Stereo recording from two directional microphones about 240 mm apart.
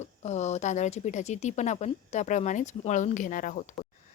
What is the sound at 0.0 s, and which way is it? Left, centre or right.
A woman's voice, left.